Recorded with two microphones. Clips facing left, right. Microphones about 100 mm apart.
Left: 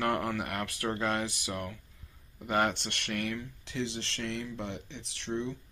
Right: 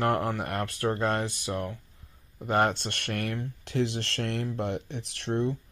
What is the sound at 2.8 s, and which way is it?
Speech, 50° right (ahead or behind).